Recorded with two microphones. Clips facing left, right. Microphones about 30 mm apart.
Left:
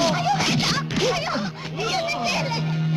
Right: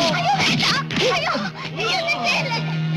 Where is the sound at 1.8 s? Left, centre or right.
Right.